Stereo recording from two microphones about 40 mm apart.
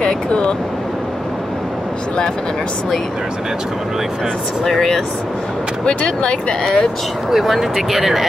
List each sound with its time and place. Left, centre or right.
0.0 s speech: left
4.6 s speech: centre
5.9 s speech: left
6.6 s speech: centre
7.2 s speech: centre